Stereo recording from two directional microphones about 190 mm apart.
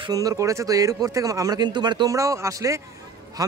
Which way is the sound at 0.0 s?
20° right (ahead or behind).